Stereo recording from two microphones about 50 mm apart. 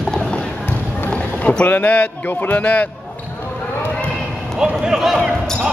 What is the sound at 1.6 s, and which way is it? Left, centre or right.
A man's voice, left.